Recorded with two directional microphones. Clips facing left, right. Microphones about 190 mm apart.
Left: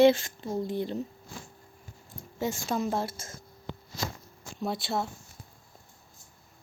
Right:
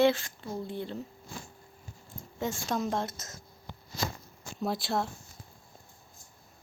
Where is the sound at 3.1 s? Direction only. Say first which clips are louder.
Left 2 dB; 30° left (ahead or behind).